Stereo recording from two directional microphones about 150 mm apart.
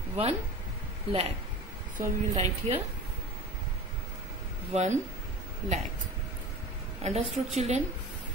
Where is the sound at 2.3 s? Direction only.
45° right (ahead or behind).